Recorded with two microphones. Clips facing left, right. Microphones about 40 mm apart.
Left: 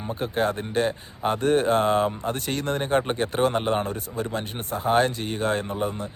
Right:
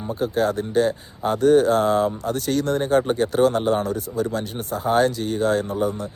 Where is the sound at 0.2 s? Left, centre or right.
Left.